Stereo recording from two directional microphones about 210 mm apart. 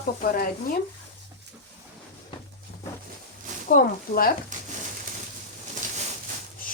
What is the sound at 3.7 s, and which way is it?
Speech, 45° left (ahead or behind).